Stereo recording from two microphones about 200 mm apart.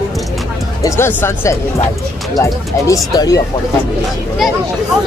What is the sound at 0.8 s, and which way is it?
Speech, 15° left (ahead or behind).